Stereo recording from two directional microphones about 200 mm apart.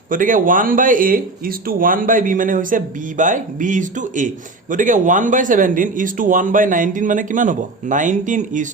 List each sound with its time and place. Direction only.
0.1 s speech: 40° right (ahead or behind)